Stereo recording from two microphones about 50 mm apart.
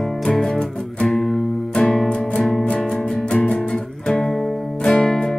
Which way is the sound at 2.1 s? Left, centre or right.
Left.